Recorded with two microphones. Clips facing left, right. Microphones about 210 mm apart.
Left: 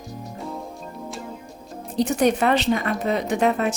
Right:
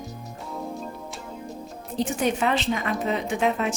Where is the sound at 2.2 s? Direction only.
55° left (ahead or behind).